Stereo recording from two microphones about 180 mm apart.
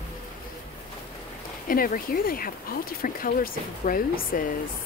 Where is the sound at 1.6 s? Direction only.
55° left (ahead or behind).